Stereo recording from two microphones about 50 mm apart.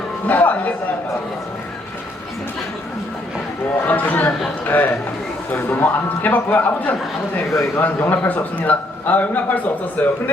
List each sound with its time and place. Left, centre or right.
0.3 s a man's voice: left
3.8 s a man's voice: left